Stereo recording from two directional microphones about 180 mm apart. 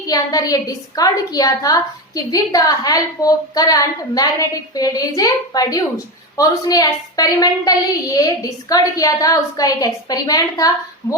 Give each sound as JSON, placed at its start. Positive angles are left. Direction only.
{"t": 0.1, "sound": "a woman's voice", "side_deg": 20}